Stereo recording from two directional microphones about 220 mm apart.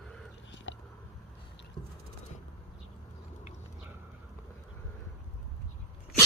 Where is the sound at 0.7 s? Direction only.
55° left (ahead or behind).